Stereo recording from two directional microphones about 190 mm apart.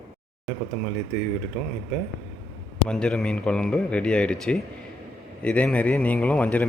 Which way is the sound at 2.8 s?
5° left (ahead or behind).